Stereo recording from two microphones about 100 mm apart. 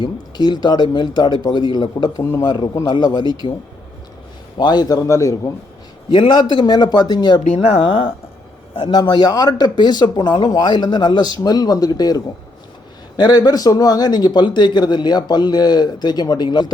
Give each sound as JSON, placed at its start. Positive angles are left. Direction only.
{"t": 0.0, "sound": "speech", "side_deg": 45}
{"t": 4.5, "sound": "speech", "side_deg": 45}
{"t": 6.1, "sound": "speech", "side_deg": 55}
{"t": 7.4, "sound": "a man's voice", "side_deg": 90}
{"t": 9.0, "sound": "speech", "side_deg": 45}